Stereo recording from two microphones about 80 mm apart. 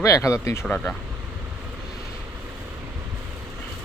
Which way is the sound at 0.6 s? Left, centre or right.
Centre.